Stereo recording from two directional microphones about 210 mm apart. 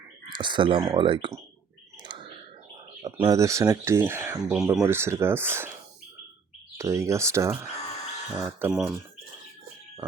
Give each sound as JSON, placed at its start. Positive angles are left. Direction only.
{"t": 0.3, "sound": "speech", "side_deg": -20}
{"t": 2.0, "sound": "a sound", "side_deg": -20}
{"t": 3.0, "sound": "speech", "side_deg": -20}
{"t": 6.7, "sound": "speech", "side_deg": -15}